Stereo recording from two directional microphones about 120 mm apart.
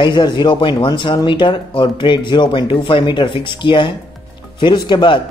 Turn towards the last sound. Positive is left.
turn(degrees=40)  # may be behind; listen again after turning